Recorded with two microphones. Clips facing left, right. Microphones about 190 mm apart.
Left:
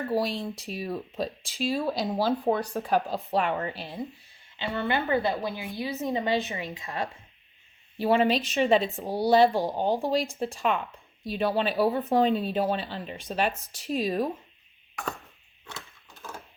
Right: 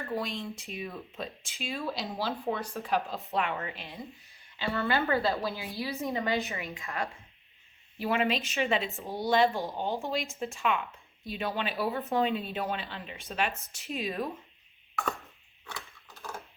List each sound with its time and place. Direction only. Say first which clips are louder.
0.1 s speech: left 5 dB; 35° left (ahead or behind)
4.5 s a woman's voice: left 1 dB; 20° left (ahead or behind)